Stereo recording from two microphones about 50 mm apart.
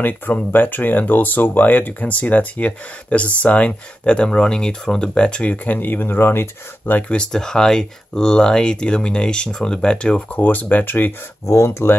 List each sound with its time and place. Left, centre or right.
0.0 s speech: left
7.0 s speech: left
7.3 s speech: centre
10.4 s speech: left
11.4 s speech: left